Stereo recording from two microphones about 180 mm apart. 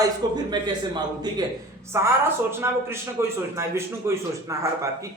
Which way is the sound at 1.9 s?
15° right (ahead or behind).